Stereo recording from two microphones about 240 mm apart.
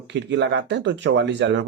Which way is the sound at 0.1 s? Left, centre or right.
Right.